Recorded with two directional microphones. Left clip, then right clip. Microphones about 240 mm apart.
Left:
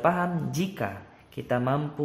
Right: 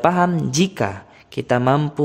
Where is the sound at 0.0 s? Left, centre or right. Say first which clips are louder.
Right 8 dB; right.